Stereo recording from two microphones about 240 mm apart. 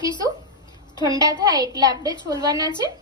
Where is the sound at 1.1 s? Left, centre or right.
Centre.